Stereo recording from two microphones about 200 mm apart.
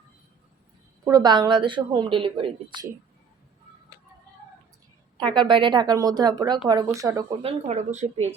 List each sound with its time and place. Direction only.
1.0 s a woman's voice: 20° right (ahead or behind)
5.3 s a woman's voice: 25° right (ahead or behind)
7.4 s speech: 35° right (ahead or behind)